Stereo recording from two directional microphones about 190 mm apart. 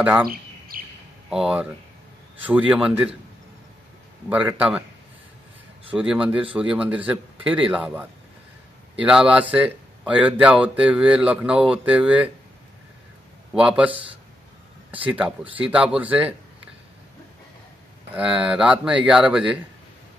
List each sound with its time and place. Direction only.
0.0 s speech: 10° right (ahead or behind)
0.3 s bird: 50° right (ahead or behind)
1.3 s speech: 5° right (ahead or behind)
2.7 s speech: 5° right (ahead or behind)
4.3 s speech: 5° right (ahead or behind)
5.9 s speech: 5° right (ahead or behind)
13.5 s speech: 5° right (ahead or behind)
15.0 s speech: 5° right (ahead or behind)
18.1 s speech: 5° right (ahead or behind)